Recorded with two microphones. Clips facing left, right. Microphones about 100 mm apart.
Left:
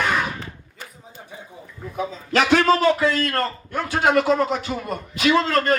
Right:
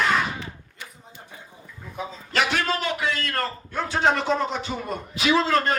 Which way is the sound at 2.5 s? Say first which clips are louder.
Left 9 dB; 40° left (ahead or behind).